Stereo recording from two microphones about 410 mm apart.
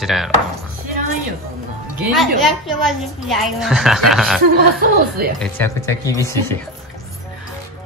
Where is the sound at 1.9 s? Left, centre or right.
Centre.